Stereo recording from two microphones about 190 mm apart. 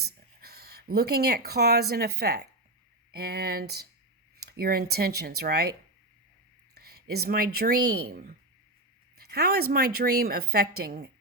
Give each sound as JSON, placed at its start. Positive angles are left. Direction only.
{"t": 0.0, "sound": "speech", "side_deg": -55}
{"t": 6.7, "sound": "a woman's voice", "side_deg": -55}